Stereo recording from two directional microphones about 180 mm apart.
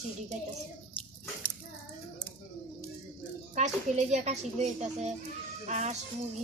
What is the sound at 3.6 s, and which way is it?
A woman's voice, 40° right (ahead or behind).